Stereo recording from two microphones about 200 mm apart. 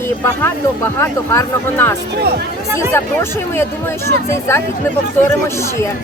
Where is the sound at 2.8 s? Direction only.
10° left (ahead or behind).